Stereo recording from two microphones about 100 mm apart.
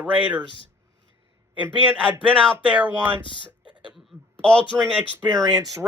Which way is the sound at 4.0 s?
5° left (ahead or behind).